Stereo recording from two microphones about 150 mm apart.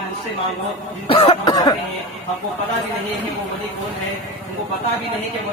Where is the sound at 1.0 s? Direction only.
40° left (ahead or behind).